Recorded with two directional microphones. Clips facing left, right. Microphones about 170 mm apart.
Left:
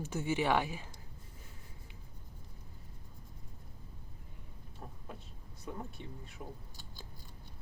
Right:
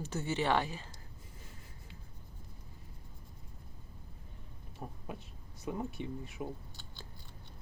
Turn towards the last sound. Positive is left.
turn(degrees=-20)  # may be behind; listen again after turning